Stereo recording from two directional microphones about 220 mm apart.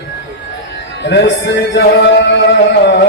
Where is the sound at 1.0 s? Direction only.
55° left (ahead or behind).